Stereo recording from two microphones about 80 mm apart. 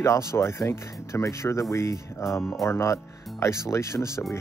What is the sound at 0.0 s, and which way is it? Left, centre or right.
Speech, left.